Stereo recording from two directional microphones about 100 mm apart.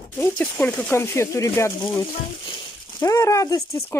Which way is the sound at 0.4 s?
15° left (ahead or behind).